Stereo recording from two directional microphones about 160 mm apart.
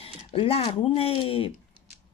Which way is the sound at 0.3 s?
35° left (ahead or behind).